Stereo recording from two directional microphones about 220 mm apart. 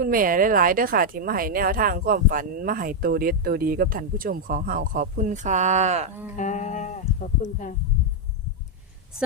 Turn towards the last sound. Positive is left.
turn(degrees=35)  # may be behind; listen again after turning